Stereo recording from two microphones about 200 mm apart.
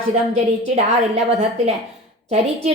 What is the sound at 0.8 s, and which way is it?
A woman's voice, 30° right (ahead or behind).